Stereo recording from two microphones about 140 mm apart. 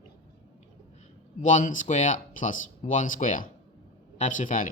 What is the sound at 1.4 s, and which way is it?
Speech, 65° left (ahead or behind).